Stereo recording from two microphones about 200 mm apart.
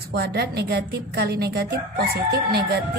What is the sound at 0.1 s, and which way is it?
A woman's voice, 55° right (ahead or behind).